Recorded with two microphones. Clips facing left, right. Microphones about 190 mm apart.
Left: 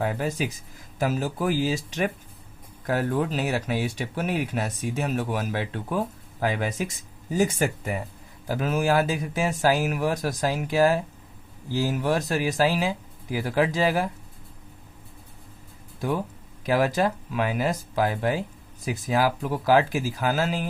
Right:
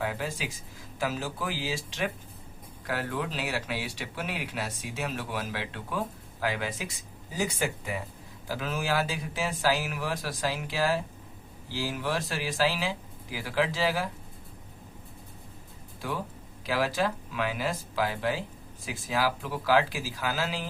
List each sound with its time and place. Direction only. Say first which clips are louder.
0.0 s speech: left 6 dB; 45° left (ahead or behind)
2.8 s speech: left 7 dB; 45° left (ahead or behind)
16.0 s speech: left 7 dB; 45° left (ahead or behind)